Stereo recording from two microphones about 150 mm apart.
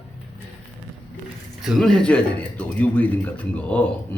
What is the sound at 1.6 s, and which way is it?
Speech, centre (ahead or behind).